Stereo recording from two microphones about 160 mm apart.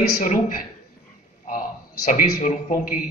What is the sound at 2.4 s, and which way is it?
Speech, 55° left (ahead or behind).